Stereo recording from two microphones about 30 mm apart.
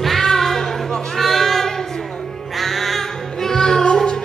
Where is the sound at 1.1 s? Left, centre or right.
Centre.